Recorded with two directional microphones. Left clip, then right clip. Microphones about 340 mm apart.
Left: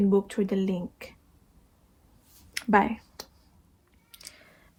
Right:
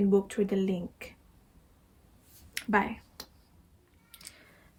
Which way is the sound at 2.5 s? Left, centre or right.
Centre.